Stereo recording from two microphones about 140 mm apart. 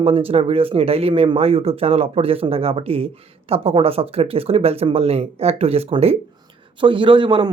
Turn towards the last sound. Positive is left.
turn(degrees=-35)  # may be behind; listen again after turning